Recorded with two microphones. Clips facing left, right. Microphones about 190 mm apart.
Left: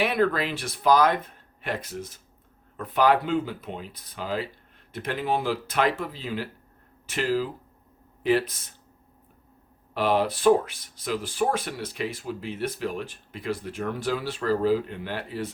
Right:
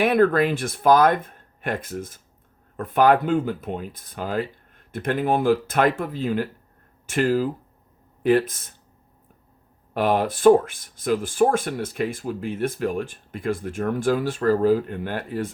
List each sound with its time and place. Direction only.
0.0 s speech: 50° right (ahead or behind)
9.9 s speech: 50° right (ahead or behind)